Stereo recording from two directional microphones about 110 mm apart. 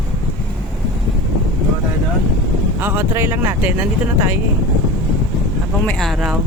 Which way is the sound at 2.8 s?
20° right (ahead or behind).